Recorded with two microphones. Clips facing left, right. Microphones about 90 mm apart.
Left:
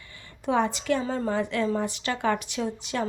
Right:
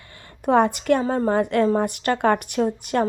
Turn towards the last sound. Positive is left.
turn(degrees=-50)  # may be behind; listen again after turning